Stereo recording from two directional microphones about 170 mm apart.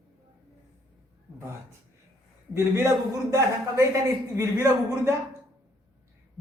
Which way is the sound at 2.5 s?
15° right (ahead or behind).